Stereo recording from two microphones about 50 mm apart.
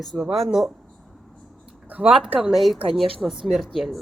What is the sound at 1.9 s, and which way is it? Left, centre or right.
Speech, right.